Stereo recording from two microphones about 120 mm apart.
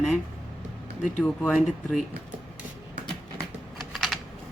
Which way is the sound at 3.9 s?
Centre (ahead or behind).